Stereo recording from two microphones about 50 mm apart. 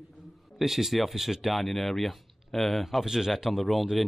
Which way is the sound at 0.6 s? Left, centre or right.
Centre.